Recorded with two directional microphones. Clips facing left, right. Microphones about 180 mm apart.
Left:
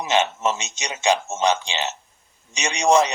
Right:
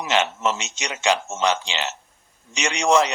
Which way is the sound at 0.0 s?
20° left (ahead or behind).